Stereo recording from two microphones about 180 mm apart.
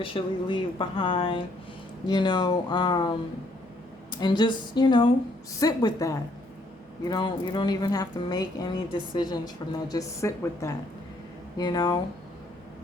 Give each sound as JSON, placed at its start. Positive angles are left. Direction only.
{"t": 0.0, "sound": "a woman's voice", "side_deg": 30}